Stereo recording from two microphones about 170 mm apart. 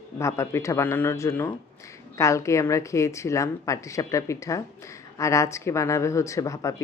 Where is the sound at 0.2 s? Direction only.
15° left (ahead or behind).